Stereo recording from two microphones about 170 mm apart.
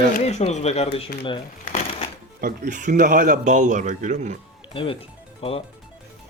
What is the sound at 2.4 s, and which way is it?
A man's voice, 50° right (ahead or behind).